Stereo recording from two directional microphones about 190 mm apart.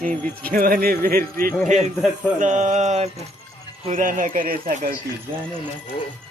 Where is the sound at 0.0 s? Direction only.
50° right (ahead or behind).